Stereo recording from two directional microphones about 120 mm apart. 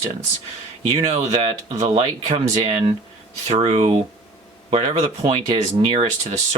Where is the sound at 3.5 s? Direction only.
55° right (ahead or behind).